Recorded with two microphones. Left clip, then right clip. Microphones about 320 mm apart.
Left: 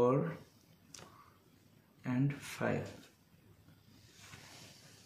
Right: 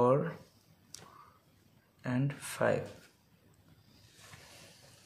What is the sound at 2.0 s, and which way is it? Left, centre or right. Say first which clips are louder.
Speech: right 1 dB; right.